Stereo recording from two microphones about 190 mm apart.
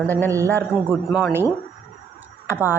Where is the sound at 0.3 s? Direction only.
15° right (ahead or behind).